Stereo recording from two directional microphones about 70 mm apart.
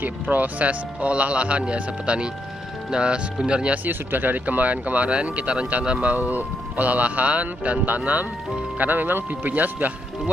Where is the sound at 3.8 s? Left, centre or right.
Right.